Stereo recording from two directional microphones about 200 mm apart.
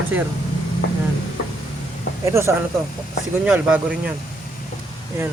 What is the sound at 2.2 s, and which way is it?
Speech, 15° right (ahead or behind).